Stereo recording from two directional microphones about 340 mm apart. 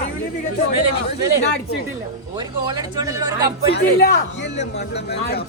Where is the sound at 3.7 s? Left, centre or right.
Left.